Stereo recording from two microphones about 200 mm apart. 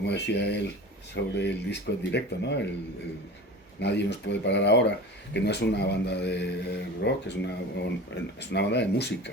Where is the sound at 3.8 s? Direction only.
60° left (ahead or behind).